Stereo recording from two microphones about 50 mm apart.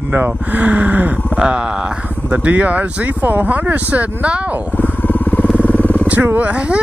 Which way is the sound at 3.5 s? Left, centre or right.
Right.